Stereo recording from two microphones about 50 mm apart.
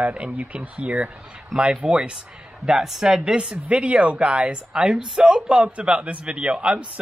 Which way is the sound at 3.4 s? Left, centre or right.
Right.